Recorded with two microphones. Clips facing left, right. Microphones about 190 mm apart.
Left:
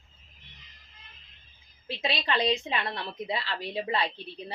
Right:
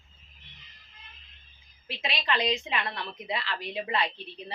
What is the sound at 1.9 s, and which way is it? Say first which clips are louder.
A woman's voice: left 2 dB; 30° left (ahead or behind).